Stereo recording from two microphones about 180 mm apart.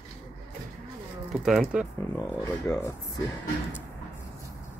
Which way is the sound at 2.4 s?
15° left (ahead or behind).